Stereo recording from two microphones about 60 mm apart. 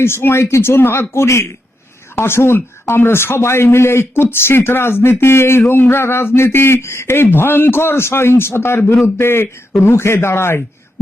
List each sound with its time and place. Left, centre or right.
0.0 s a man's voice: left